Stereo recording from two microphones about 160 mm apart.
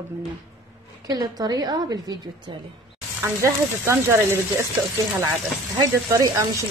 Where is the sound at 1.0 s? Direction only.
25° right (ahead or behind).